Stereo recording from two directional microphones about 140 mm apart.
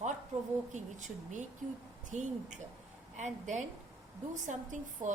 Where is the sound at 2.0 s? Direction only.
60° right (ahead or behind).